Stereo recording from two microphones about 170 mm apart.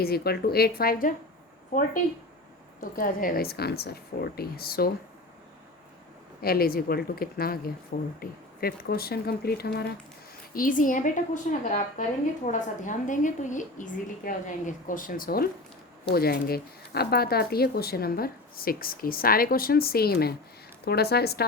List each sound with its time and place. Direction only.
0.0 s speech: 65° left (ahead or behind)
2.9 s speech: 55° left (ahead or behind)
6.4 s speech: 60° left (ahead or behind)
10.5 s a woman's voice: 55° left (ahead or behind); by 21.4 s 70° left (ahead or behind)